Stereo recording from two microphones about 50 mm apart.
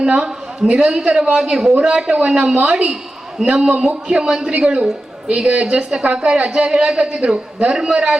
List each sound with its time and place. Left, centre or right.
0.0 s a woman's voice: centre